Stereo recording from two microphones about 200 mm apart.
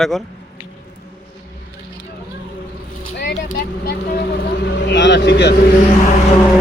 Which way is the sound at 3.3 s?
45° left (ahead or behind).